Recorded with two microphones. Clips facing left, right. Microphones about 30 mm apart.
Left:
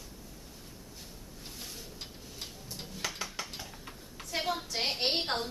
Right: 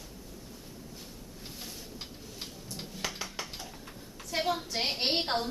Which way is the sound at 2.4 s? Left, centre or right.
Centre.